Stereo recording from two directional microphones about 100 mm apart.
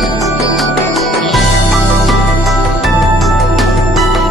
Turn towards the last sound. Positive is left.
turn(degrees=0)  # may be behind; listen again after turning